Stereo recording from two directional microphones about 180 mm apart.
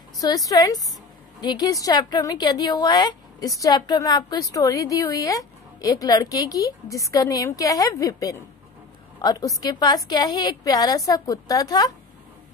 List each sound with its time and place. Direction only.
0.2 s a woman's voice: 20° left (ahead or behind)